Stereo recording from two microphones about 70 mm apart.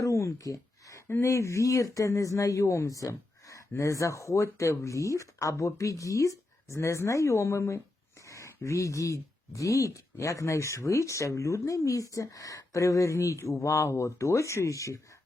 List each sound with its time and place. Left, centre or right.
0.0 s a sound: left
1.0 s speech: left
1.3 s speech: left